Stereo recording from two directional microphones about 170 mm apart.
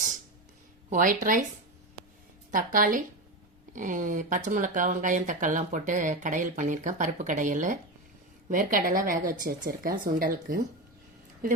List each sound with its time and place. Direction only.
0.9 s speech: 50° right (ahead or behind)
2.5 s a woman's voice: 55° right (ahead or behind)